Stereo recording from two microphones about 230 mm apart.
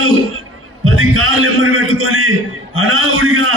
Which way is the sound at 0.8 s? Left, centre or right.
Right.